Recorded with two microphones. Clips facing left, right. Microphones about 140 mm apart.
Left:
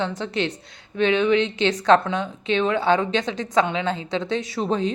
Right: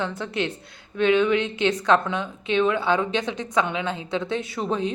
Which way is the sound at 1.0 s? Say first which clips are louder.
Left 1 dB; 25° left (ahead or behind).